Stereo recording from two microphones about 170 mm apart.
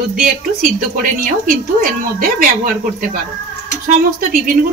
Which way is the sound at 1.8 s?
55° right (ahead or behind).